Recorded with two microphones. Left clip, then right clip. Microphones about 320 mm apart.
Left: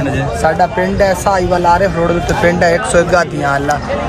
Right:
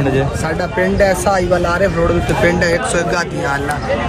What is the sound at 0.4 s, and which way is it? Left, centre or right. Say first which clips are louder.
Speech: left 5 dB; left.